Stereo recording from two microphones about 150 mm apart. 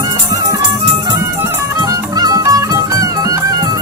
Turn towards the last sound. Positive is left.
turn(degrees=-25)  # may be behind; listen again after turning